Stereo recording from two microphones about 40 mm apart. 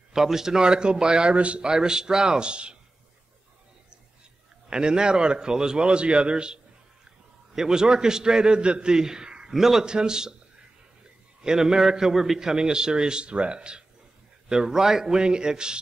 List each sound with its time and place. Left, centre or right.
0.1 s a man's voice: centre
1.3 s speech: right
1.7 s a man's voice: centre
2.4 s speech: right
4.6 s a man's voice: right
8.9 s a man's voice: centre
9.5 s a man's voice: centre
9.8 s a man's voice: centre
11.4 s a man's voice: centre